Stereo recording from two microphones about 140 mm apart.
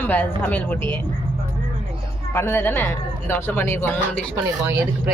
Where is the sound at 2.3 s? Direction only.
15° left (ahead or behind).